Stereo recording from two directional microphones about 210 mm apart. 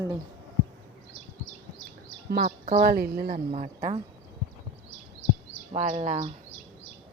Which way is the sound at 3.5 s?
30° right (ahead or behind).